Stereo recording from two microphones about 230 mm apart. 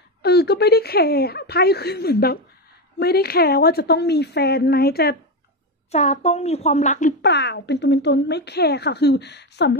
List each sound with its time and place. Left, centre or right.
0.2 s speech: left
5.9 s speech: left
7.2 s speech: left